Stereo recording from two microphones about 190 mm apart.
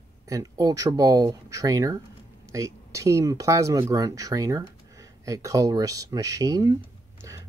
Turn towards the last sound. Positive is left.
turn(degrees=-20)  # may be behind; listen again after turning